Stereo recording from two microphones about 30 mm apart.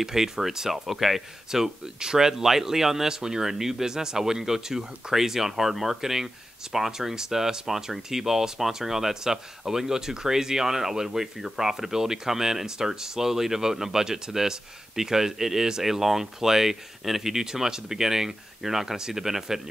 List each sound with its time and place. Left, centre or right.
0.0 s speech: centre
1.5 s speech: right